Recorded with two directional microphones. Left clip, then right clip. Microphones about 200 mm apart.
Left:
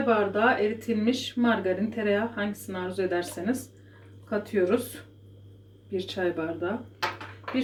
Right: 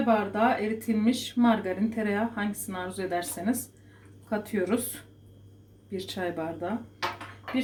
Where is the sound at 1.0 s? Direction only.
25° right (ahead or behind).